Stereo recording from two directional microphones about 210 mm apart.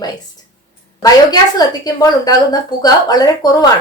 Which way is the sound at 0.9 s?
20° left (ahead or behind).